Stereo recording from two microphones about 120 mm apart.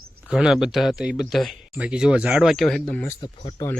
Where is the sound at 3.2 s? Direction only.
45° left (ahead or behind).